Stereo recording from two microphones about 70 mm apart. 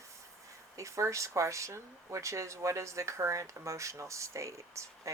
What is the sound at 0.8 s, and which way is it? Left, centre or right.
Speech, right.